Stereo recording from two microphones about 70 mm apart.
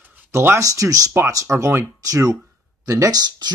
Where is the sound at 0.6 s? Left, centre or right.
Right.